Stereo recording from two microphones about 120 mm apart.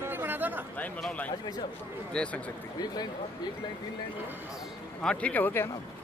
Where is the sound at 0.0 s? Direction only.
15° right (ahead or behind).